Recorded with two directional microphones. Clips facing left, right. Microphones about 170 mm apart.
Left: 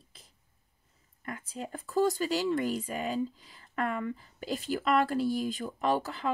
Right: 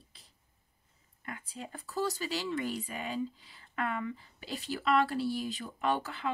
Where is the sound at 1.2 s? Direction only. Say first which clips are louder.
Left 4 dB; 45° left (ahead or behind).